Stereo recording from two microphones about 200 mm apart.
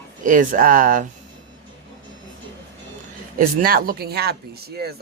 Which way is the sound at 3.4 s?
45° right (ahead or behind).